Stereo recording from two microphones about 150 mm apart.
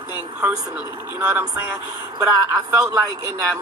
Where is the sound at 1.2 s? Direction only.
10° right (ahead or behind).